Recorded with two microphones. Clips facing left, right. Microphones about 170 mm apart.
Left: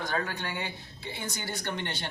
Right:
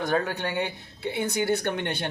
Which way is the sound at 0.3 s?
65° right (ahead or behind).